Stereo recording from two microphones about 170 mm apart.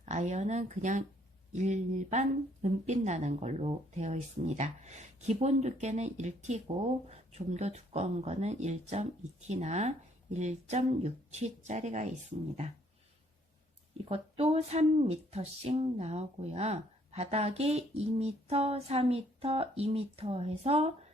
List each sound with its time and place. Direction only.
0.0 s speech: 45° right (ahead or behind)
14.0 s speech: 35° right (ahead or behind)